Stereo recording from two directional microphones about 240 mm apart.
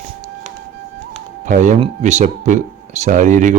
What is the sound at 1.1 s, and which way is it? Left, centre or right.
Speech, right.